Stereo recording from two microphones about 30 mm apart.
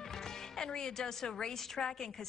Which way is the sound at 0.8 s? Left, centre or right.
Centre.